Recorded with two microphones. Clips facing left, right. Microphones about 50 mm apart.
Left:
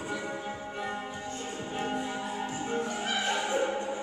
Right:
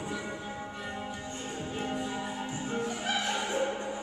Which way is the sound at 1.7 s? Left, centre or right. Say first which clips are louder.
Left 2 dB; centre.